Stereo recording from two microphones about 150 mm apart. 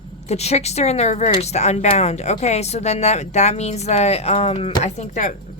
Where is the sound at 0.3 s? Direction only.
45° left (ahead or behind).